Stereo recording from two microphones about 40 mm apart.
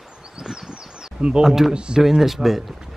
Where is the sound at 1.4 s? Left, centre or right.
Centre.